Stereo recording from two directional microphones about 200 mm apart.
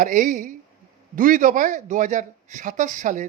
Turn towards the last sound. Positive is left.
turn(degrees=-40)  # may be behind; listen again after turning